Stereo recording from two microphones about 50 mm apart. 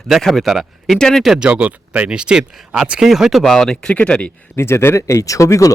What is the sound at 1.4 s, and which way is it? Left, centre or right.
Speech, right.